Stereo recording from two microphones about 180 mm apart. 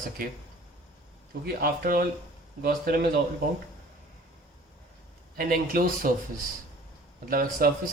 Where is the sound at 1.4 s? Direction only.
55° right (ahead or behind).